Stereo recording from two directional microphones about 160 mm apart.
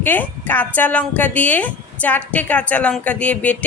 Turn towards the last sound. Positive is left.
turn(degrees=10)  # may be behind; listen again after turning